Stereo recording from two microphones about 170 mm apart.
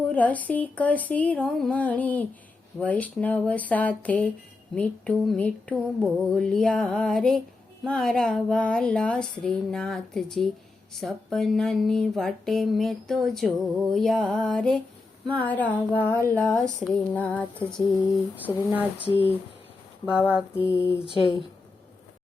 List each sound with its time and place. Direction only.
0.1 s speech: 10° left (ahead or behind)
4.7 s music: 5° left (ahead or behind)
15.3 s speech: 10° left (ahead or behind)
18.4 s speech: 10° right (ahead or behind)
19.0 s speech: 35° left (ahead or behind)
20.1 s music: 5° right (ahead or behind)
20.6 s speech: 15° left (ahead or behind)
21.0 s speech: 30° left (ahead or behind)